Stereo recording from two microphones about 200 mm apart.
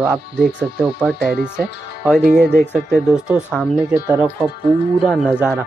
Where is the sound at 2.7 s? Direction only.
5° right (ahead or behind).